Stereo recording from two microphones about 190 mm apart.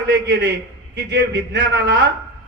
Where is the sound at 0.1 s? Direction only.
65° right (ahead or behind).